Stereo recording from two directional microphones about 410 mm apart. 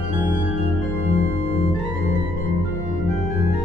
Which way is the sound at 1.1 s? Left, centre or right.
Centre.